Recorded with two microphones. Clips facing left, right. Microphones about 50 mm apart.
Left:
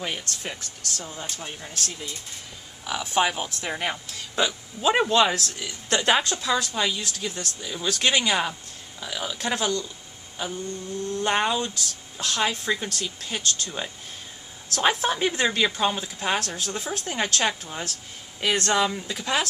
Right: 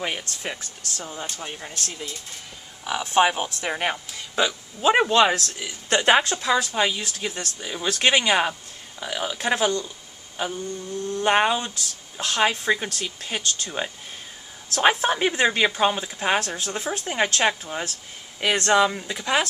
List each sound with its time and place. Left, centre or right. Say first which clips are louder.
0.0 s a man's voice: right 2 dB; centre
3.2 s a man's voice: right 4 dB; right
10.3 s a sound: right 3 dB; centre
11.1 s a man's voice: right 4 dB; centre